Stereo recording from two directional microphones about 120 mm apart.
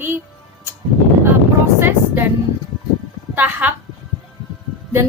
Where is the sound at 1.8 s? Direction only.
15° right (ahead or behind).